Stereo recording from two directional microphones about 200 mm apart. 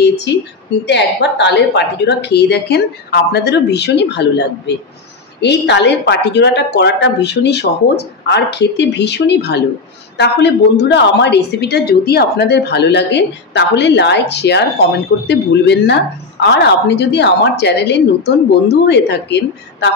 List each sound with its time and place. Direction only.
0.0 s a woman's voice: 55° left (ahead or behind)